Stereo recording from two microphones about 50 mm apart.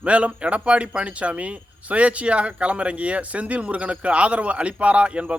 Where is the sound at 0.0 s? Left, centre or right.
Right.